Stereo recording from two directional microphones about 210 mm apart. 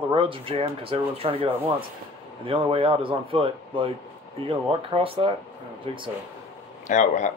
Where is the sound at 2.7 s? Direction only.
25° right (ahead or behind).